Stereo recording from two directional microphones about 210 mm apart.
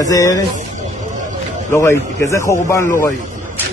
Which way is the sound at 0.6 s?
35° right (ahead or behind).